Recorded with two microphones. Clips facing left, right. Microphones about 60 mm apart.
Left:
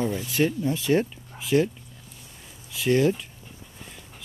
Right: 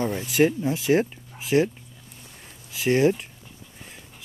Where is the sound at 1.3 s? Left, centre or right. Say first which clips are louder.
Left 1 dB; centre.